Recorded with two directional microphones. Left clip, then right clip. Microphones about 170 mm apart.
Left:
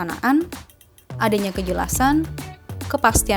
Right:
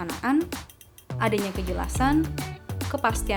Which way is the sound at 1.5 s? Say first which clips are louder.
Left 7 dB; 50° left (ahead or behind).